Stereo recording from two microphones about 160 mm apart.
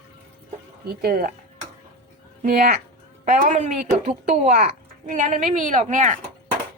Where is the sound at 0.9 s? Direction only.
65° right (ahead or behind).